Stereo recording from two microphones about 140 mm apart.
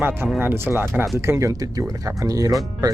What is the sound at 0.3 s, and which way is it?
Speech, 15° right (ahead or behind).